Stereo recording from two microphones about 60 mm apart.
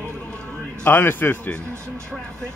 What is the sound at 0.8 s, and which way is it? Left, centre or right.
Speech, left.